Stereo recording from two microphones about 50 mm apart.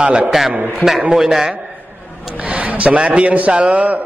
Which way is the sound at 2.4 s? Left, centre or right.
Right.